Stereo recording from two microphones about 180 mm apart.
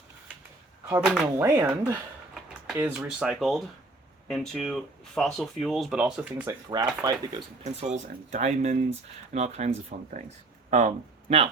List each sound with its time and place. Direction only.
1.2 s speech: 15° right (ahead or behind)
2.3 s a sound: centre (ahead or behind)
2.7 s speech: 10° right (ahead or behind)
6.7 s speech: 20° right (ahead or behind)
7.6 s speech: 40° right (ahead or behind)